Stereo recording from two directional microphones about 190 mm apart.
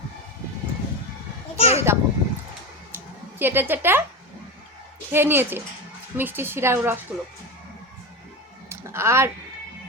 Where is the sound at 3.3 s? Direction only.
10° right (ahead or behind).